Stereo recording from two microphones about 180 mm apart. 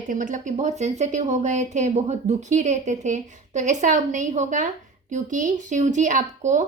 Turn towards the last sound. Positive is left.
turn(degrees=-45)  # may be behind; listen again after turning